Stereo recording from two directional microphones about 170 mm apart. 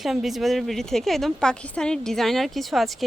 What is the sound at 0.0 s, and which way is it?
A woman's voice, centre (ahead or behind).